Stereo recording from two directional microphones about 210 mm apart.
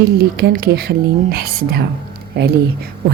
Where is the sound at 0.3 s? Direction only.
50° right (ahead or behind).